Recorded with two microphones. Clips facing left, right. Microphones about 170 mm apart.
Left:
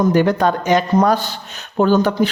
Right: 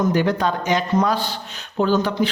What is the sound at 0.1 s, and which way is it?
Speech, 50° left (ahead or behind).